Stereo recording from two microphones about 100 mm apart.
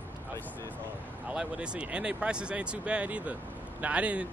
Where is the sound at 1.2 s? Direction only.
10° right (ahead or behind).